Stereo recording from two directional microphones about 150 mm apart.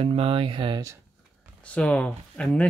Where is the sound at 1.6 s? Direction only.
10° left (ahead or behind).